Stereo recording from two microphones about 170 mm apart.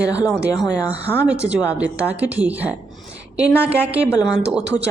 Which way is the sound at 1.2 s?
5° right (ahead or behind).